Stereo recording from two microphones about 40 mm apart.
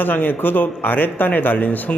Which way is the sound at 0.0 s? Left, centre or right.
Left.